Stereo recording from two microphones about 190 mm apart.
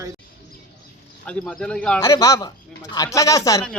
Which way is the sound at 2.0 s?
15° left (ahead or behind).